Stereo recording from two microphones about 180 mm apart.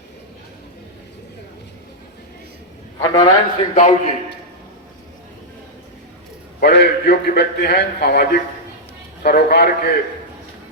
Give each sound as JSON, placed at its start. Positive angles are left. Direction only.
{"t": 3.0, "sound": "a man's voice", "side_deg": 20}
{"t": 3.8, "sound": "a man's voice", "side_deg": 40}
{"t": 6.6, "sound": "a man's voice", "side_deg": 60}